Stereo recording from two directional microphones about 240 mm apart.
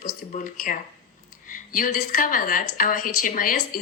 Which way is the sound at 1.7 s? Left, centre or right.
Left.